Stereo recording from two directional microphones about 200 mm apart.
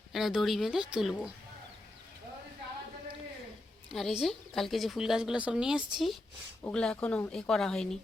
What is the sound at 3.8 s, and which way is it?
A woman's voice, centre (ahead or behind).